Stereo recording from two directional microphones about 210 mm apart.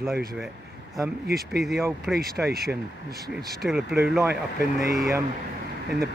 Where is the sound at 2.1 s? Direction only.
45° right (ahead or behind).